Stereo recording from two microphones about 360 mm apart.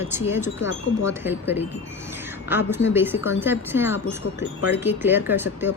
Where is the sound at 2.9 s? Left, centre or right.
Centre.